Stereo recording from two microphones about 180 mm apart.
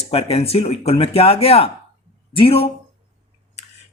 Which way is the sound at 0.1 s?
35° left (ahead or behind).